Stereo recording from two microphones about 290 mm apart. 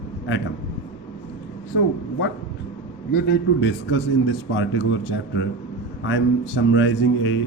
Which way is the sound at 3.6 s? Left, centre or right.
Left.